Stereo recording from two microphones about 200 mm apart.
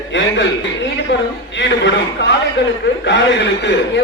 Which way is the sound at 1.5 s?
65° left (ahead or behind).